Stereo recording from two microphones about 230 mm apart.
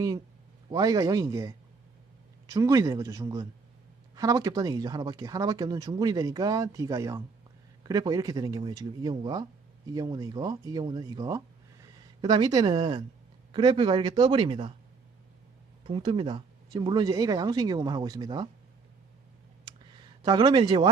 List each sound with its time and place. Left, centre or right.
0.7 s speech: centre
15.8 s speech: right
19.6 s clicking: centre